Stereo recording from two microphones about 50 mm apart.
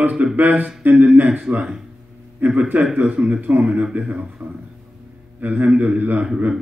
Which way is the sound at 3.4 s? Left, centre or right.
Right.